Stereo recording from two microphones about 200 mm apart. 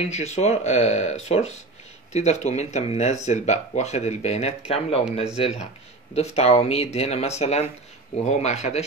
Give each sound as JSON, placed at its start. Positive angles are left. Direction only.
{"t": 0.0, "sound": "speech", "side_deg": 35}